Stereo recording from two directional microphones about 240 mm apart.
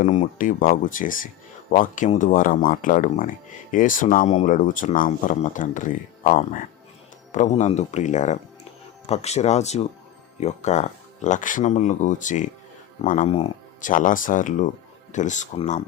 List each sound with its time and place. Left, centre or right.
0.0 s speech: left